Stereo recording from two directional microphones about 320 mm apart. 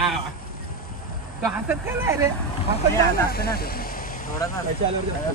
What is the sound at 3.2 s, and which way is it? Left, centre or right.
Vehicle, left.